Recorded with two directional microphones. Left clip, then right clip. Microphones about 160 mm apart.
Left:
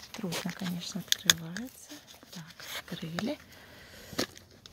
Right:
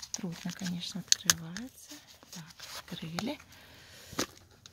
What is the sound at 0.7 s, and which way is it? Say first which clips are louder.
Speech: right 2 dB; centre (ahead or behind).